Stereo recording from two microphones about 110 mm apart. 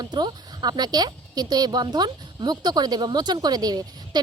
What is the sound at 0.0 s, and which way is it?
A woman's voice, 40° right (ahead or behind).